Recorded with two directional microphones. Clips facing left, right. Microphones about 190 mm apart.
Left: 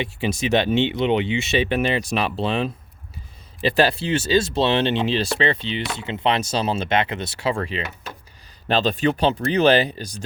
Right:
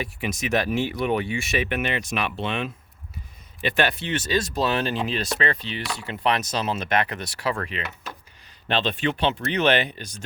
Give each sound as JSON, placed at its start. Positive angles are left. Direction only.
{"t": 0.0, "sound": "speech", "side_deg": 30}
{"t": 8.6, "sound": "speech", "side_deg": 40}